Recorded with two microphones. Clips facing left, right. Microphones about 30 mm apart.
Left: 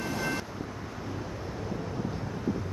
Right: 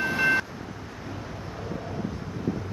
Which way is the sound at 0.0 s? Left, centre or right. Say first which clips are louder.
Right 9 dB; right.